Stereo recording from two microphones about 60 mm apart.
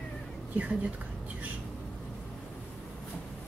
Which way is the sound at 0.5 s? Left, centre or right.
Centre.